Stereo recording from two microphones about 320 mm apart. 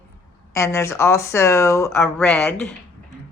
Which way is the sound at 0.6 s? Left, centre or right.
Centre.